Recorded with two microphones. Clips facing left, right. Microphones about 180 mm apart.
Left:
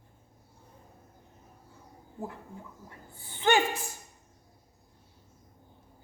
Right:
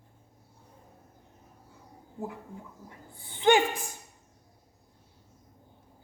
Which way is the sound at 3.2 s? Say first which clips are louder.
Right 3 dB; 15° right (ahead or behind).